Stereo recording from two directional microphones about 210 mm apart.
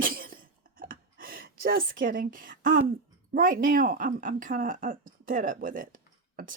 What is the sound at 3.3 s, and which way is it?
Speech, 40° right (ahead or behind).